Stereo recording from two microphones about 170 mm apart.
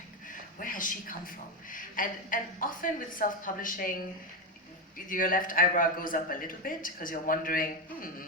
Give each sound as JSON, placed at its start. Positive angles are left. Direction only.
{"t": 0.6, "sound": "a woman's voice", "side_deg": 50}
{"t": 5.0, "sound": "a man's voice", "side_deg": 55}